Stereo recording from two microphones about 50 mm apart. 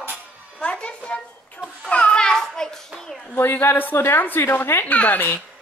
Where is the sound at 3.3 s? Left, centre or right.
Left.